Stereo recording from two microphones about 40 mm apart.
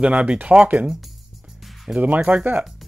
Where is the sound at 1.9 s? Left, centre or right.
Right.